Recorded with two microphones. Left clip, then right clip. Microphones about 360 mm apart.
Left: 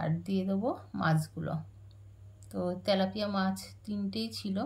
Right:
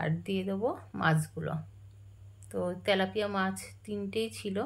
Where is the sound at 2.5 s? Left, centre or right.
Centre.